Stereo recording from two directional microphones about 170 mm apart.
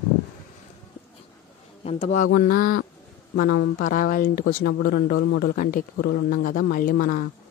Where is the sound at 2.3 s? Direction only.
60° left (ahead or behind).